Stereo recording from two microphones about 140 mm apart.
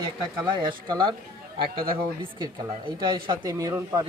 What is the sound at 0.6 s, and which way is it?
Speech, 35° right (ahead or behind).